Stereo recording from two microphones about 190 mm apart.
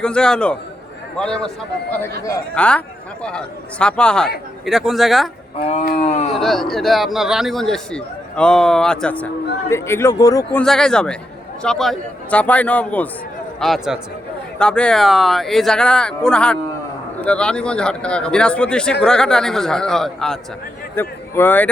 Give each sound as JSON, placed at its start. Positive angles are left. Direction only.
{"t": 0.0, "sound": "a man's voice", "side_deg": 5}
{"t": 5.6, "sound": "speech", "side_deg": 35}
{"t": 6.3, "sound": "a man's voice", "side_deg": 0}
{"t": 10.6, "sound": "a man's voice", "side_deg": 5}